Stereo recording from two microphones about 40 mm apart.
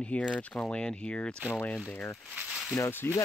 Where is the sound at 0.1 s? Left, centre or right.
Left.